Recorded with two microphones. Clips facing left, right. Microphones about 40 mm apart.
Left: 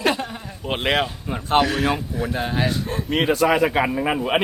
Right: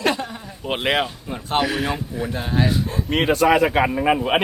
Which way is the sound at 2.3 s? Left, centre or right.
Centre.